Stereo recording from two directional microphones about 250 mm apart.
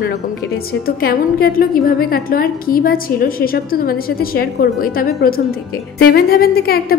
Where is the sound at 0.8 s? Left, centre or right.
Left.